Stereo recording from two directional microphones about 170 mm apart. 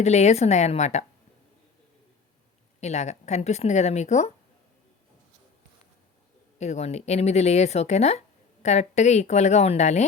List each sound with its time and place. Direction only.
0.0 s speech: 40° left (ahead or behind)
2.8 s speech: 40° left (ahead or behind)
6.6 s speech: 40° left (ahead or behind)